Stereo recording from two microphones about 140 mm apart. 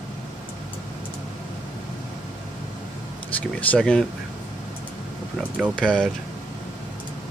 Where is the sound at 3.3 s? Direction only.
10° left (ahead or behind).